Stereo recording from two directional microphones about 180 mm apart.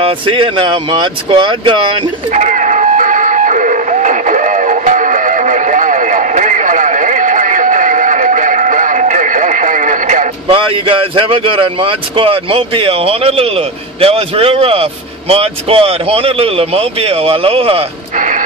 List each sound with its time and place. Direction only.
0.0 s speech: 30° right (ahead or behind)
2.3 s music: 45° right (ahead or behind)
10.5 s speech: 30° right (ahead or behind)